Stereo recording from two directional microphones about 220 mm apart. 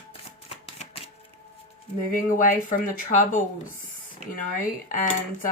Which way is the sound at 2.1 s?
35° left (ahead or behind).